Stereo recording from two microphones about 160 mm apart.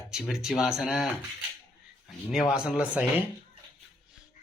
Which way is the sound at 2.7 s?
10° right (ahead or behind).